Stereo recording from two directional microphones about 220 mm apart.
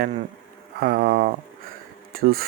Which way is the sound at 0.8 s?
40° right (ahead or behind).